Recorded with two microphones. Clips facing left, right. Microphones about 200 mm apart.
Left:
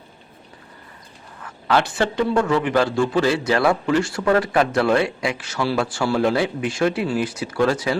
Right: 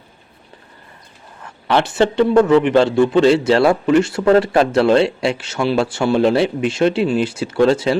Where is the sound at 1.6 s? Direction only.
20° right (ahead or behind).